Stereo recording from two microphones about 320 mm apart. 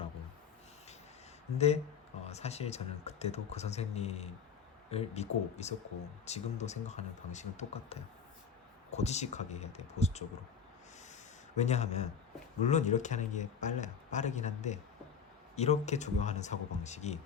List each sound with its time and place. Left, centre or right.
1.5 s speech: centre
11.5 s speech: left